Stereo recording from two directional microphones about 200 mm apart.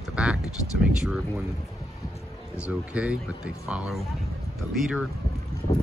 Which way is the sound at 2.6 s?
5° right (ahead or behind).